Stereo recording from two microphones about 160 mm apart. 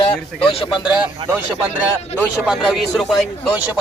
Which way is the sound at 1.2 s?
35° right (ahead or behind).